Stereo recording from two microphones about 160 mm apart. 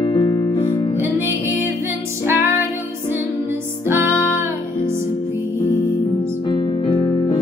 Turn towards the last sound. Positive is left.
turn(degrees=25)  # may be behind; listen again after turning